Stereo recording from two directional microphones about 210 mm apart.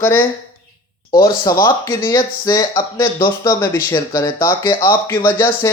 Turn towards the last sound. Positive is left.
turn(degrees=15)  # may be behind; listen again after turning